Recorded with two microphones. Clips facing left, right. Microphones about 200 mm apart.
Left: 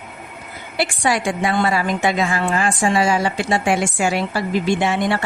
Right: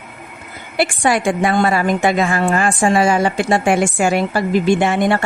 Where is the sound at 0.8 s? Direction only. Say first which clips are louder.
Right 4 dB; 55° right (ahead or behind).